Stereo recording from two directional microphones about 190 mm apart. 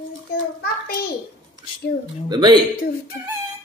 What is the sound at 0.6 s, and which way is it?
Speech, 55° left (ahead or behind).